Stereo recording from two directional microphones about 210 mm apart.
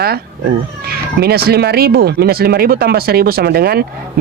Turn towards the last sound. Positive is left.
turn(degrees=-45)  # may be behind; listen again after turning